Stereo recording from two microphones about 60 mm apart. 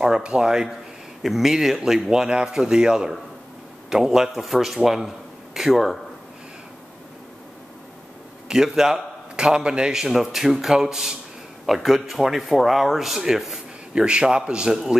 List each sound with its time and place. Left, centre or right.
0.0 s a man's voice: centre
8.5 s a man's voice: centre
13.9 s a man's voice: centre